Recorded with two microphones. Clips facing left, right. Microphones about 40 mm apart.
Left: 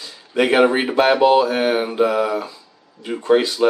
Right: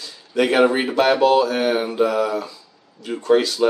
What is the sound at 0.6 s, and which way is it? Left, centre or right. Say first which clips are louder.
Speech: left 1 dB; centre.